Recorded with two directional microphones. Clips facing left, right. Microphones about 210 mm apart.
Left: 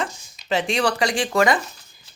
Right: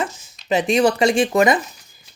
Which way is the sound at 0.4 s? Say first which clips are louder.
Right 5 dB; 20° right (ahead or behind).